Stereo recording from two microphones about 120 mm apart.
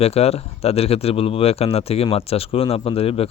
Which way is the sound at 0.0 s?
60° left (ahead or behind).